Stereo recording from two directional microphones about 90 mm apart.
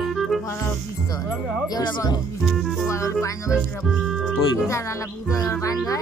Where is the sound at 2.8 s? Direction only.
35° left (ahead or behind).